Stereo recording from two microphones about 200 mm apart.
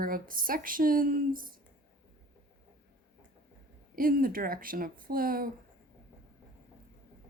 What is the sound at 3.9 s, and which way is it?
Speech, 45° right (ahead or behind).